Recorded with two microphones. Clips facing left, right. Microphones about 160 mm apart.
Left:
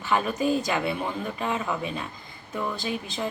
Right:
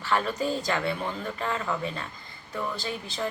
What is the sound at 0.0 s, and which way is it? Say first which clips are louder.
Speech: left 2 dB; 15° left (ahead or behind).